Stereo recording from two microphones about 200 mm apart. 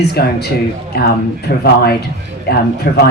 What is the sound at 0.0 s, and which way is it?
A man's voice, 55° left (ahead or behind).